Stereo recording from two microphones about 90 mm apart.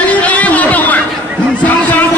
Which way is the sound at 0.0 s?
15° left (ahead or behind).